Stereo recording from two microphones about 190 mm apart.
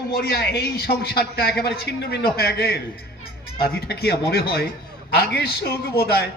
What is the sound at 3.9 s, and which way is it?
A man's voice, 60° left (ahead or behind).